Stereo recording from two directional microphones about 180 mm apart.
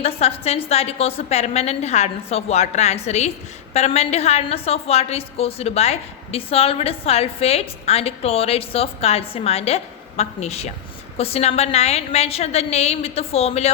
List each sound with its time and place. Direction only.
0.0 s a woman's voice: 35° left (ahead or behind)